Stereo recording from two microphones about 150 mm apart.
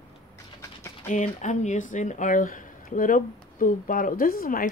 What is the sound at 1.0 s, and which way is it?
Speech, 50° left (ahead or behind).